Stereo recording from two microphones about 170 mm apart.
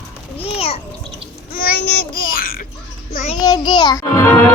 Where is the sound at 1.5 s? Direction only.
60° left (ahead or behind).